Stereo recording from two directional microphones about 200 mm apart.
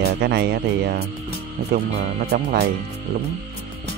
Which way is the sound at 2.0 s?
45° right (ahead or behind).